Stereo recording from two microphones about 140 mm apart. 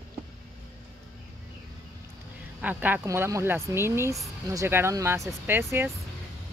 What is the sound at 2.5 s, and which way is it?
Speech, 10° right (ahead or behind).